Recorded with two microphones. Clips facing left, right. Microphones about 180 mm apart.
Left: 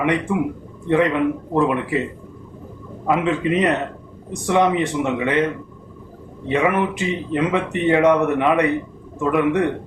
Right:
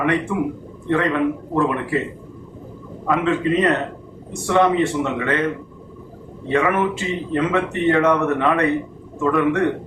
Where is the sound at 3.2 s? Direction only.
15° left (ahead or behind).